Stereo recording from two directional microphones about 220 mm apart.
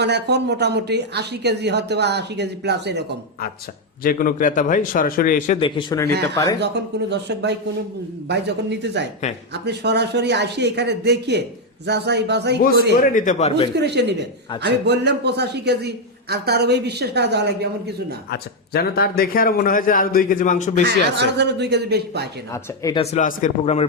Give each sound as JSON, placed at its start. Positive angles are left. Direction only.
{"t": 0.0, "sound": "a man's voice", "side_deg": -50}
{"t": 4.0, "sound": "a man's voice", "side_deg": 40}
{"t": 5.5, "sound": "speech", "side_deg": 25}
{"t": 7.1, "sound": "a man's voice", "side_deg": -50}
{"t": 13.0, "sound": "a man's voice", "side_deg": 35}
{"t": 13.7, "sound": "a man's voice", "side_deg": -50}
{"t": 18.3, "sound": "a man's voice", "side_deg": 45}
{"t": 20.8, "sound": "a man's voice", "side_deg": -50}
{"t": 22.5, "sound": "speech", "side_deg": 15}
{"t": 23.0, "sound": "speech", "side_deg": 35}